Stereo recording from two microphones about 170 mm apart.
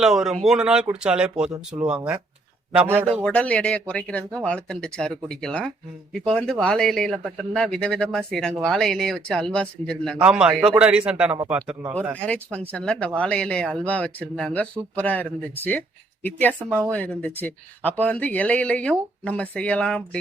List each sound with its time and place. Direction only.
0.0 s speech: 5° right (ahead or behind)
1.5 s speech: 20° right (ahead or behind)
1.9 s speech: 5° right (ahead or behind)
3.2 s speech: 5° left (ahead or behind)
12.2 s speech: 5° left (ahead or behind)